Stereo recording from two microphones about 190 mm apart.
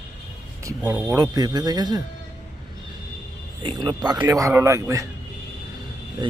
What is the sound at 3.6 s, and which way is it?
A man's voice, 25° right (ahead or behind).